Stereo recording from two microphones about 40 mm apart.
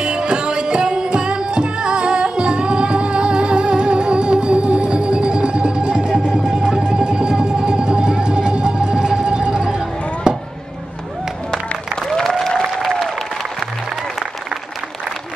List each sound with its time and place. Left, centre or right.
0.0 s music: right
9.7 s chop: centre
11.9 s applause: centre